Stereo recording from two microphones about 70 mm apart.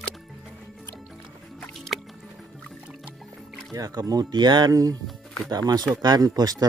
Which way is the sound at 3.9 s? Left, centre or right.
Right.